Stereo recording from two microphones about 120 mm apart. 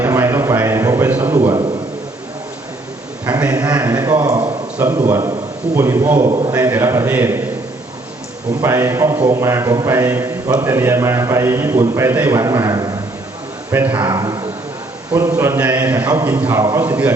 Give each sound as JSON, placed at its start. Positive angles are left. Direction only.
{"t": 0.0, "sound": "a sound", "side_deg": -20}
{"t": 3.7, "sound": "a man's voice", "side_deg": -30}
{"t": 6.5, "sound": "a man's voice", "side_deg": -15}
{"t": 8.6, "sound": "a man's voice", "side_deg": -25}
{"t": 13.7, "sound": "speech", "side_deg": -15}
{"t": 15.1, "sound": "a man's voice", "side_deg": -25}